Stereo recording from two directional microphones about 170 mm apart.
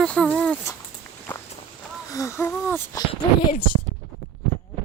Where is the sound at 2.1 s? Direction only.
20° left (ahead or behind).